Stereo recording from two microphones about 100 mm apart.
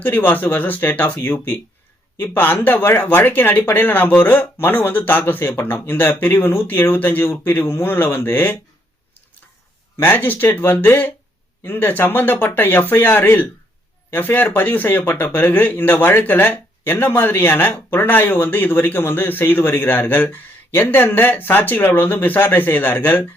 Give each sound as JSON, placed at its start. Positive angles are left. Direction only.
{"t": 0.0, "sound": "speech", "side_deg": 15}
{"t": 10.0, "sound": "speech", "side_deg": 20}